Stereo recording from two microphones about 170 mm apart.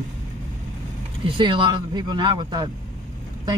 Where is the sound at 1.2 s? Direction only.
30° right (ahead or behind).